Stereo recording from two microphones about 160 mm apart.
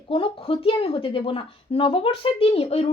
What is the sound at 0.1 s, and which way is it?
A woman's voice, 35° left (ahead or behind).